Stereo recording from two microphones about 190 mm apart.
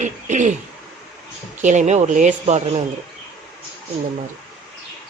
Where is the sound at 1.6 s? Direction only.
40° right (ahead or behind).